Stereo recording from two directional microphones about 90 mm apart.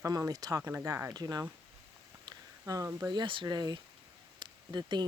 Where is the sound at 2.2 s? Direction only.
40° right (ahead or behind).